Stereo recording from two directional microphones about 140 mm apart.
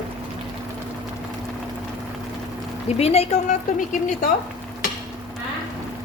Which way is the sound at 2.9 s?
45° left (ahead or behind).